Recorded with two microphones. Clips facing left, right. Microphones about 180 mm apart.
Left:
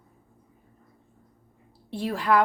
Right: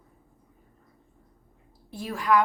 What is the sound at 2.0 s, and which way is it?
Speech, 30° left (ahead or behind).